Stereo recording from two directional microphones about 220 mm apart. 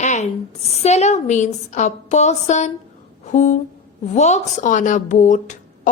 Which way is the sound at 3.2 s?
30° left (ahead or behind).